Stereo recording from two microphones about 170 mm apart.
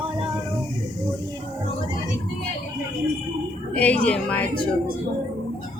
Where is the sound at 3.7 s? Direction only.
5° left (ahead or behind).